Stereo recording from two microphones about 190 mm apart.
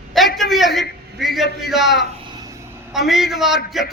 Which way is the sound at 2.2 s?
20° right (ahead or behind).